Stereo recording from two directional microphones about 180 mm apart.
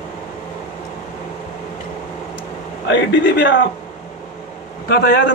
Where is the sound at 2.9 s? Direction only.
75° left (ahead or behind).